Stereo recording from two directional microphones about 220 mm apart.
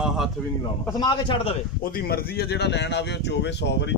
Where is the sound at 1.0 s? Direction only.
25° left (ahead or behind).